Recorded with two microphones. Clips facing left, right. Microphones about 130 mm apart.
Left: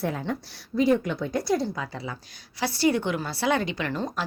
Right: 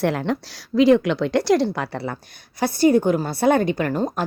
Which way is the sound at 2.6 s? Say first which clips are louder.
Right 7 dB; 50° right (ahead or behind).